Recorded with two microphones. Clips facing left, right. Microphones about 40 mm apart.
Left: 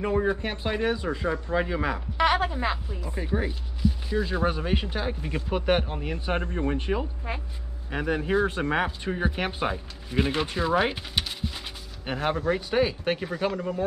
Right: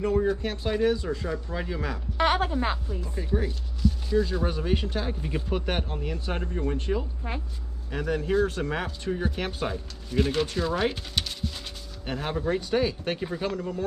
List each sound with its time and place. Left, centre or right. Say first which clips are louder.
0.0 s speech: even; left
2.2 s a sound: left 1 dB; left
3.0 s speech: even; left